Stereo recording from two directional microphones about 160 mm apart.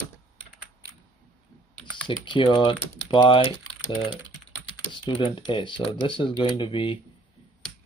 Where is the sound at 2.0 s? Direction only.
30° left (ahead or behind).